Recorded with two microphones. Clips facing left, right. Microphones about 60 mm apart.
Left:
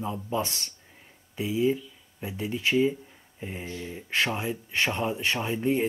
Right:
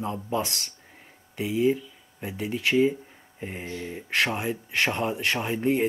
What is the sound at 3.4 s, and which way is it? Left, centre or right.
Mantra, right.